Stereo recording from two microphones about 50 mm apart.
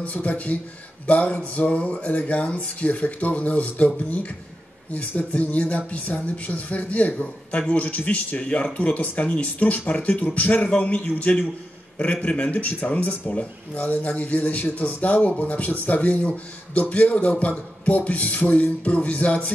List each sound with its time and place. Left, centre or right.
0.0 s speech: left